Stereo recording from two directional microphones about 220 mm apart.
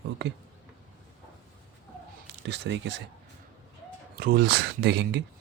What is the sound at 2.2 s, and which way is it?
Speech, 50° right (ahead or behind).